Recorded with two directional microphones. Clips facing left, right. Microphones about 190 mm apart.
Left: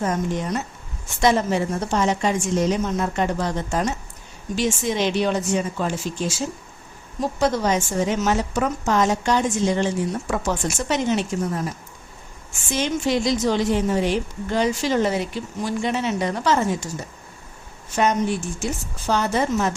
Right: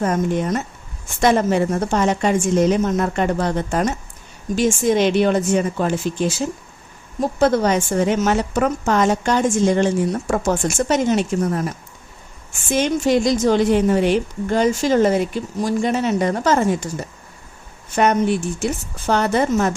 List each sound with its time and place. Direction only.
0.0 s a woman's voice: 55° right (ahead or behind)
7.3 s a woman's voice: 55° right (ahead or behind)
12.7 s a woman's voice: 50° right (ahead or behind)
17.9 s a woman's voice: 60° right (ahead or behind)